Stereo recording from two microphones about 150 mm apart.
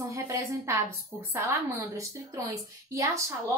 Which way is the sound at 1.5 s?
20° right (ahead or behind).